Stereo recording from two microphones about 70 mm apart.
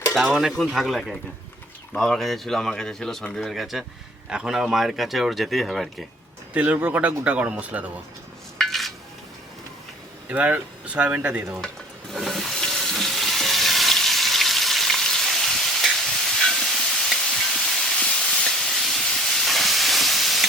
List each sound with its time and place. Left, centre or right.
0.1 s speech: centre
6.5 s speech: right
8.5 s dishes: centre
10.2 s speech: right
12.1 s frying: centre
18.0 s steam: centre